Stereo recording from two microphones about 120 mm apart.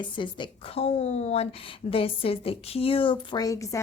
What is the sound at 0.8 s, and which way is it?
Speech, 65° left (ahead or behind).